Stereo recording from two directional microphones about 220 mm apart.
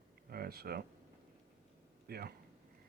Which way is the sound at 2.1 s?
45° right (ahead or behind).